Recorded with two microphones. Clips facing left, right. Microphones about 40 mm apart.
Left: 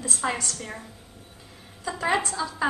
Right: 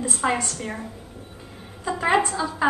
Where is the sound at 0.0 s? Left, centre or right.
Right.